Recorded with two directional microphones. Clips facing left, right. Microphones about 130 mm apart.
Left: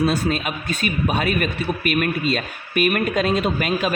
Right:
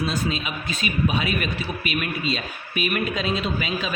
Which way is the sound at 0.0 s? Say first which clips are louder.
Left 5 dB; 50° left (ahead or behind).